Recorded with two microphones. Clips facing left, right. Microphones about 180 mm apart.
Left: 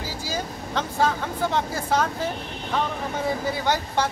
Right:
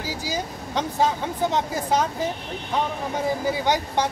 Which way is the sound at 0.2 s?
15° right (ahead or behind).